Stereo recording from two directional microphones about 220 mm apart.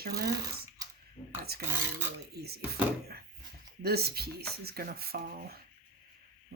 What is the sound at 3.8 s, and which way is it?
Speech, 45° right (ahead or behind).